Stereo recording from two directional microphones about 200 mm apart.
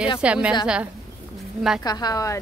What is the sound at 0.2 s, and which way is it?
Speech, 5° right (ahead or behind).